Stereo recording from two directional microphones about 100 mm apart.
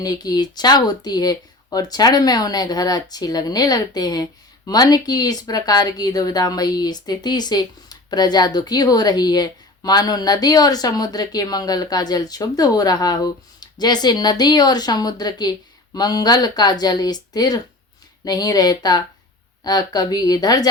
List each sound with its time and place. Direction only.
0.0 s speech: 40° left (ahead or behind)